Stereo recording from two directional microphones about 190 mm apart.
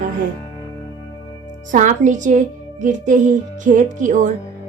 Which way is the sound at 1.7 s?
40° right (ahead or behind).